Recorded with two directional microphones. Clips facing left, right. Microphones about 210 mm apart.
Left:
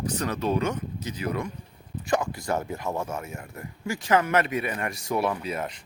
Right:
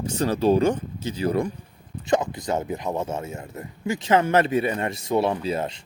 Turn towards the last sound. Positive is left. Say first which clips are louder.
# right 5 dB
turn(degrees=-30)  # may be behind; listen again after turning